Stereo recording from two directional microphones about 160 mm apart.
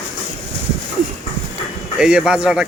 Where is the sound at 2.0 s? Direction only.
5° right (ahead or behind).